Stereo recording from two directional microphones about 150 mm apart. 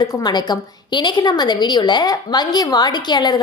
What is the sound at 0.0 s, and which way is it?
A woman's voice, 25° left (ahead or behind).